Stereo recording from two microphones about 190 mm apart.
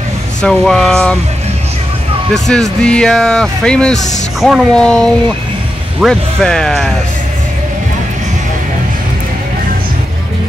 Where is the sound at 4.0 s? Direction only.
40° left (ahead or behind).